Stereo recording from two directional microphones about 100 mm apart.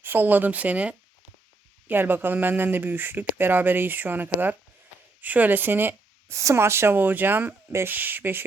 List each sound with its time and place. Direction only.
0.0 s speech: 20° right (ahead or behind)